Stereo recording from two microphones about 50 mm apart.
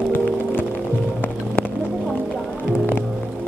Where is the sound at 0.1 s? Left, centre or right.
Left.